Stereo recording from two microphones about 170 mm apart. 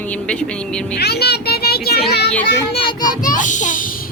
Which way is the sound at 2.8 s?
25° left (ahead or behind).